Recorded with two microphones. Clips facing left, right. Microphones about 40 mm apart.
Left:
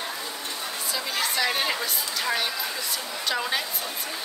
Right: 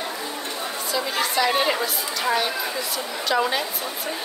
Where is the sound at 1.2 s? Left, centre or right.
Centre.